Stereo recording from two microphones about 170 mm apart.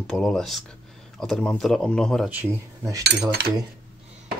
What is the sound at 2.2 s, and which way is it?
Speech, 15° right (ahead or behind).